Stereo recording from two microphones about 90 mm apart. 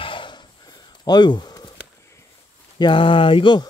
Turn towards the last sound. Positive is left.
turn(degrees=60)  # may be behind; listen again after turning